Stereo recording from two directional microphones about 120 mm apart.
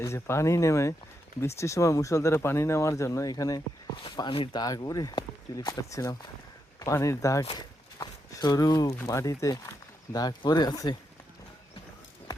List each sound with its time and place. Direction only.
0.0 s speech: 25° left (ahead or behind)
4.0 s speech: 40° left (ahead or behind)